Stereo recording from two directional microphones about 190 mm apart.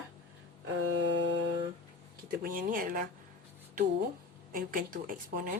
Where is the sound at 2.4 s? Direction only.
45° right (ahead or behind).